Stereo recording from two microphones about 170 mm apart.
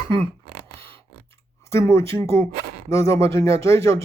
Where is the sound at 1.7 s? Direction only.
15° left (ahead or behind).